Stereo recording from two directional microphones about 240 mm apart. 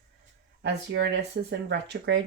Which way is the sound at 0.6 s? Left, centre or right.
Right.